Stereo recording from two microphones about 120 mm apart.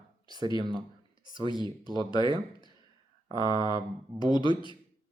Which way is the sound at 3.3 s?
35° left (ahead or behind).